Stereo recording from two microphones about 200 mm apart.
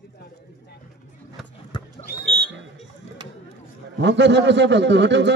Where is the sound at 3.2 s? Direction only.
25° right (ahead or behind).